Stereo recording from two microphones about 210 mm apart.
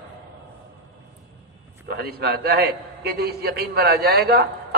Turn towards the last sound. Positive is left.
turn(degrees=-50)  # may be behind; listen again after turning